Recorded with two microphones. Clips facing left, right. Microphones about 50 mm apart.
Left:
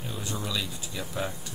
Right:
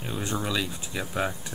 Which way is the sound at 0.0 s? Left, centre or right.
Right.